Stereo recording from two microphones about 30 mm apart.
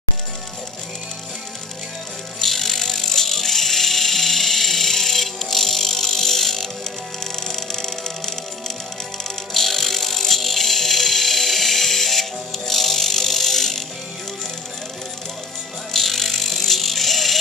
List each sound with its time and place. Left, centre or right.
2.4 s music: centre
9.5 s music: centre
15.9 s music: centre